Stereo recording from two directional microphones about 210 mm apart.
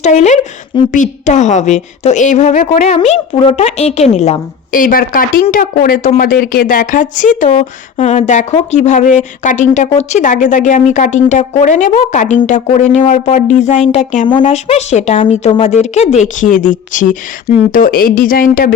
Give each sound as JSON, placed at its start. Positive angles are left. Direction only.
{"t": 0.0, "sound": "a woman's voice", "side_deg": 35}